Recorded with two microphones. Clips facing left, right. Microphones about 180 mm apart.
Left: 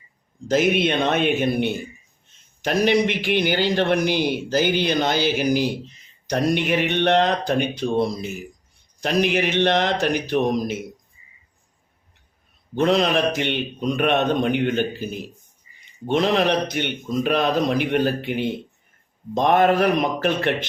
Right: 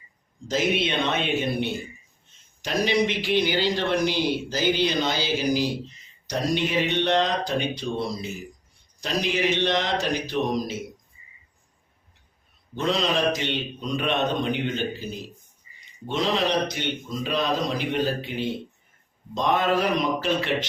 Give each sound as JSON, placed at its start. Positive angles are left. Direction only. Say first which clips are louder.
{"t": 0.4, "sound": "a man's voice", "louder": "left 5 dB", "side_deg": 55}
{"t": 12.7, "sound": "a man's voice", "louder": "left 6 dB", "side_deg": 60}
{"t": 16.0, "sound": "a man's voice", "louder": "left 5 dB", "side_deg": 60}